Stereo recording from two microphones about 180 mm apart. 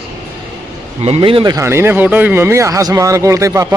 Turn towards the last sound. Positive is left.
turn(degrees=-15)  # may be behind; listen again after turning